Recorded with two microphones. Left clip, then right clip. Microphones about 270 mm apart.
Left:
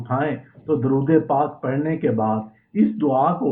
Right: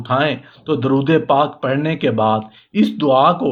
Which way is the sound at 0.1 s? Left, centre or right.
Right.